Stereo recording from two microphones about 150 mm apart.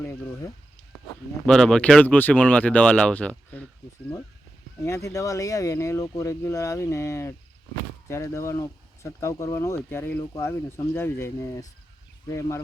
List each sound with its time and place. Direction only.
0.0 s speech: 15° left (ahead or behind)
1.5 s speech: 5° left (ahead or behind)
4.8 s speech: 20° left (ahead or behind)